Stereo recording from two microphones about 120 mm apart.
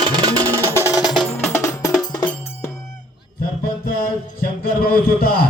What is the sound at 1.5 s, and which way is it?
Music, 25° left (ahead or behind).